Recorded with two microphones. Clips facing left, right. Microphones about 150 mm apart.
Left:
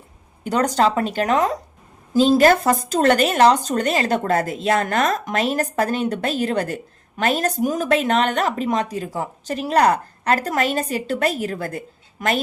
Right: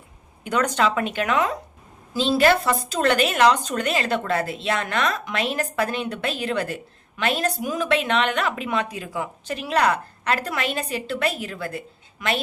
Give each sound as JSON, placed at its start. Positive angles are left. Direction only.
{"t": 0.4, "sound": "a woman's voice", "side_deg": 35}